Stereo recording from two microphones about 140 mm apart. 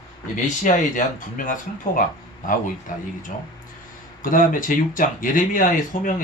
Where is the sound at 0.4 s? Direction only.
65° left (ahead or behind).